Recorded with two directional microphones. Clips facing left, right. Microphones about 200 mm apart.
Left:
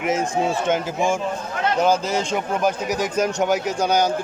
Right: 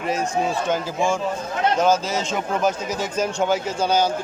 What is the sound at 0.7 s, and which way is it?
A man's voice, 15° left (ahead or behind).